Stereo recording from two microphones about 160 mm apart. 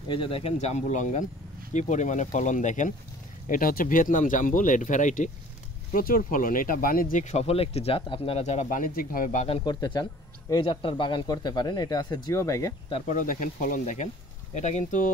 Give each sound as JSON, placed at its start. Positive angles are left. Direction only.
{"t": 0.1, "sound": "speech", "side_deg": 35}
{"t": 5.9, "sound": "speech", "side_deg": 65}
{"t": 9.5, "sound": "speech", "side_deg": 30}
{"t": 13.1, "sound": "speech", "side_deg": 55}